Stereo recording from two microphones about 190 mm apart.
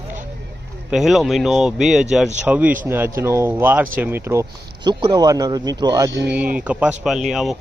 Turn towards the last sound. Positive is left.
turn(degrees=0)  # may be behind; listen again after turning